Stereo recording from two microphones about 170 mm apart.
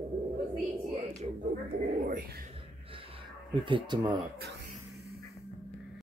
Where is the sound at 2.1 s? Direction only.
60° right (ahead or behind).